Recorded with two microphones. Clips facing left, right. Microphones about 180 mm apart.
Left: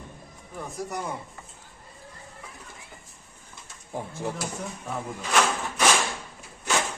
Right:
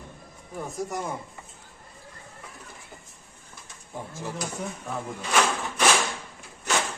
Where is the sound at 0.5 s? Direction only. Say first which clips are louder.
Right 2 dB; centre (ahead or behind).